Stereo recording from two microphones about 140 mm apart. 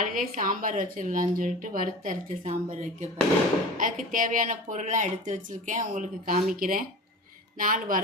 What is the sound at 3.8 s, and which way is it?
Speech, 70° right (ahead or behind).